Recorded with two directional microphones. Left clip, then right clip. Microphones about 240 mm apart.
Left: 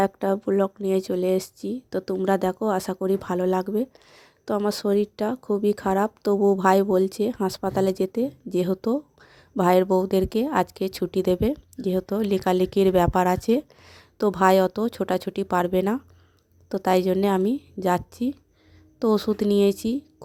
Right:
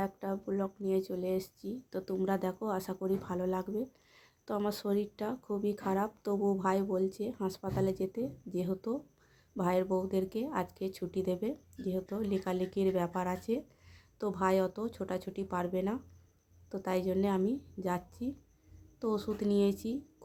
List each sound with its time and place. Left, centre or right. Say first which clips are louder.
0.0 s a woman's voice: left 14 dB; left